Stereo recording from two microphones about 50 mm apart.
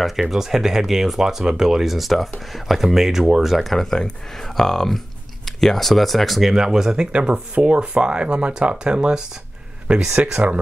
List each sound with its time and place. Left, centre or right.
0.0 s speech: centre
3.7 s speech: centre
6.5 s speech: centre
7.1 s speech: right